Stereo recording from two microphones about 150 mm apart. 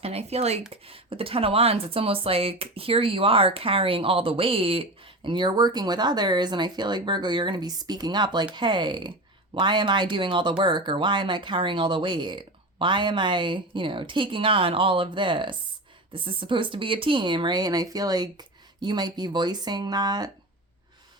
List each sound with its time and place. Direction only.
0.0 s speech: 45° right (ahead or behind); by 20.3 s 25° right (ahead or behind)